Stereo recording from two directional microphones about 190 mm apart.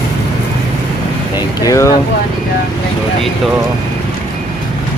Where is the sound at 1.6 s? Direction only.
15° left (ahead or behind).